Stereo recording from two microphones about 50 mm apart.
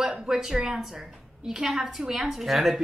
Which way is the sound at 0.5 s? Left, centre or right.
Centre.